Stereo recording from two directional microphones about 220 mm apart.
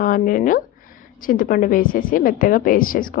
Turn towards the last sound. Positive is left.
turn(degrees=40)  # may be behind; listen again after turning